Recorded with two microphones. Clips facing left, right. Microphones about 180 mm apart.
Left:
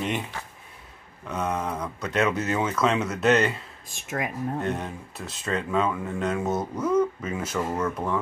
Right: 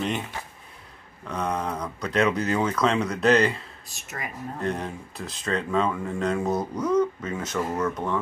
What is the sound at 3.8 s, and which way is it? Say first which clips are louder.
Speech: left 11 dB; 50° left (ahead or behind).